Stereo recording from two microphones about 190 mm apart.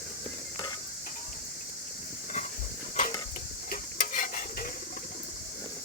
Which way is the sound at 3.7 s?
45° left (ahead or behind).